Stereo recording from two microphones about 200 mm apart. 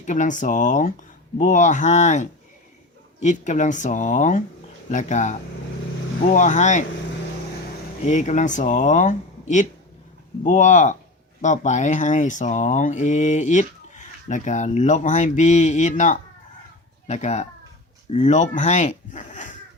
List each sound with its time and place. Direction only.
0.0 s speech: 35° left (ahead or behind)
3.2 s speech: 35° left (ahead or behind)
8.0 s speech: 35° left (ahead or behind)